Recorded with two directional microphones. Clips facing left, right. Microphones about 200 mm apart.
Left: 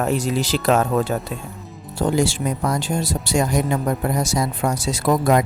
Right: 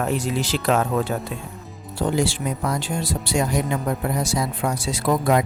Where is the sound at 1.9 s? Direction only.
45° left (ahead or behind).